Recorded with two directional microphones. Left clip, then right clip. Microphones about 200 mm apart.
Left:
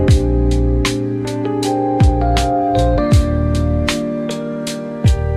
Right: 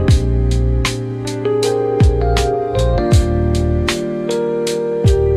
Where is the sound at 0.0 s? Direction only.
Centre (ahead or behind).